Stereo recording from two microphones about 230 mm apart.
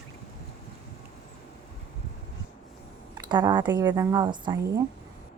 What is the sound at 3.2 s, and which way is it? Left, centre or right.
Speech, centre.